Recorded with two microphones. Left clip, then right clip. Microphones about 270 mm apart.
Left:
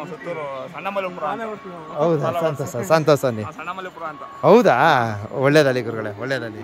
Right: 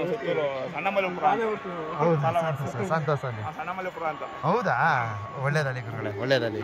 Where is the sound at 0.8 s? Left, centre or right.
Left.